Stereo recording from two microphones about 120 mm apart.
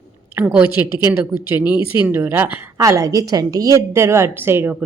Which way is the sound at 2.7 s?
25° right (ahead or behind).